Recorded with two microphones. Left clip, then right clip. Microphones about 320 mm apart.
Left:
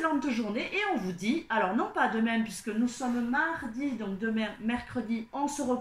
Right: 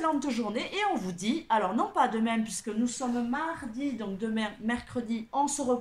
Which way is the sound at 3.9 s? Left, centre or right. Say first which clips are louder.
Even; centre.